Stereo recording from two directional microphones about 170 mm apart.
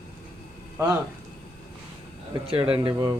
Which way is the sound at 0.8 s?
20° right (ahead or behind).